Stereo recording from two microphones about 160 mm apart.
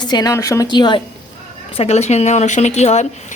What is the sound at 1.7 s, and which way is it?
Speech, 40° left (ahead or behind).